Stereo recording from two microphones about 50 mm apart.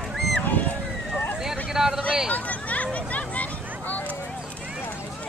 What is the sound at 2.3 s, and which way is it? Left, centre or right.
Hubbub, left.